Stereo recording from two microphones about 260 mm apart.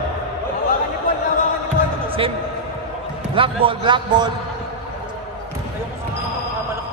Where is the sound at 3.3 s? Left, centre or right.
Centre.